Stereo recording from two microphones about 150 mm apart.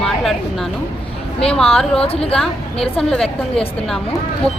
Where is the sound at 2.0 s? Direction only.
40° left (ahead or behind).